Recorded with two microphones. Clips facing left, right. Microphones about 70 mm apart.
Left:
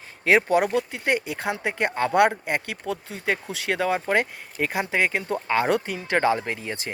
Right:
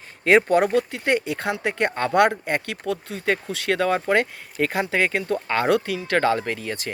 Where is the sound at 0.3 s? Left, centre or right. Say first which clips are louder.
Right 3 dB; centre.